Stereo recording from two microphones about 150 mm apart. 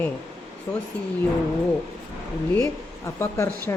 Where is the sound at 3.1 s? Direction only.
15° left (ahead or behind).